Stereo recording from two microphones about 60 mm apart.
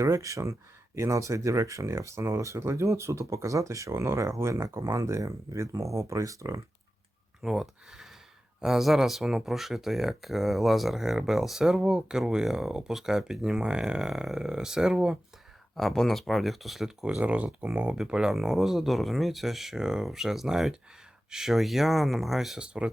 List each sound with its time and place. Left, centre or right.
0.0 s speech: right
7.4 s speech: centre
15.7 s speech: centre
17.2 s speech: right
17.9 s speech: centre
22.6 s speech: centre